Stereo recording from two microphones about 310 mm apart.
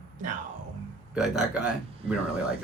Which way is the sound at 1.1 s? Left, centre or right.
Centre.